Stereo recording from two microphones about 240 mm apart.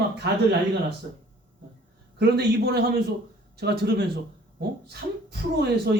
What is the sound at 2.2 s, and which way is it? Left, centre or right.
Speech, right.